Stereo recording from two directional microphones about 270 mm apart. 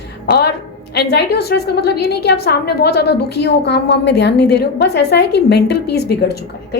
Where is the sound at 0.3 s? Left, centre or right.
Left.